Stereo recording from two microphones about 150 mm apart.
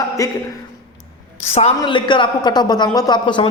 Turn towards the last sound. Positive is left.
turn(degrees=35)  # may be behind; listen again after turning